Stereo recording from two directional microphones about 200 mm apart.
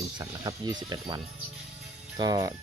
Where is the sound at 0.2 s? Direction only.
20° right (ahead or behind).